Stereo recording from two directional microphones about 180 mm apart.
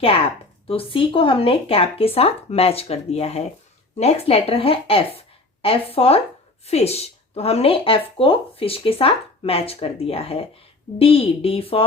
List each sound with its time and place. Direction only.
0.7 s speech: 30° left (ahead or behind)